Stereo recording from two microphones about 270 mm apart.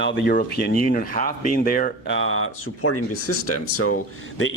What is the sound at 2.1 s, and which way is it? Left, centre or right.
Speech, left.